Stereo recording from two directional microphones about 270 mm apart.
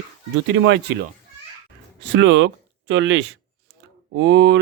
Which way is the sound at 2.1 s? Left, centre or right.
Right.